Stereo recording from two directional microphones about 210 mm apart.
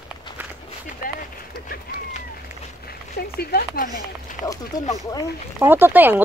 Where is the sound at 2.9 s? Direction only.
45° left (ahead or behind).